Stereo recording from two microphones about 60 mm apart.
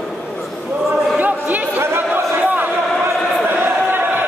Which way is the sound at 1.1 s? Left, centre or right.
Right.